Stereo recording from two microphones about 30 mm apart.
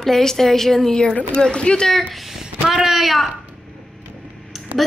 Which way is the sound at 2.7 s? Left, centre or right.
Centre.